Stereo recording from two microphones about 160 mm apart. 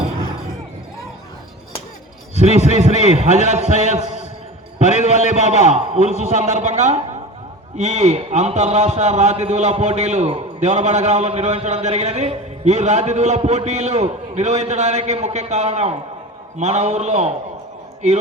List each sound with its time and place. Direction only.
2.4 s a man's voice: 45° right (ahead or behind)
5.3 s a man's voice: 45° right (ahead or behind)